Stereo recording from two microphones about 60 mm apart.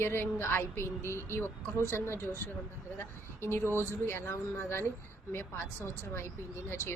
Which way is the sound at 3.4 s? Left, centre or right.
Left.